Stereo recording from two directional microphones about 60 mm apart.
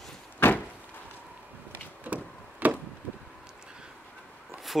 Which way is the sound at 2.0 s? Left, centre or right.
Right.